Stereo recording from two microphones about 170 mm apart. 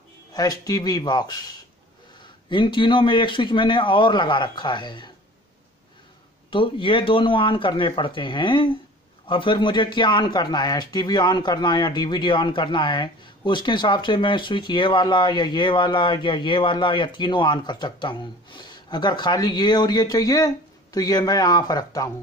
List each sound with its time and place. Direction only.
0.3 s speech: 25° left (ahead or behind)
2.5 s speech: 30° left (ahead or behind)
6.5 s speech: 30° left (ahead or behind)